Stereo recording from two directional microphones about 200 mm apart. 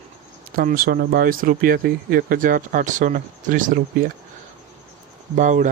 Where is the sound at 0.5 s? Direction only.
45° right (ahead or behind).